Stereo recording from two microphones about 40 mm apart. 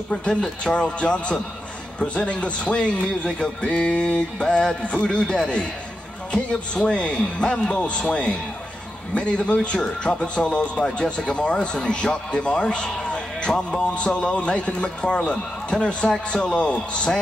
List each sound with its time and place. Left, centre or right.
0.1 s speech: left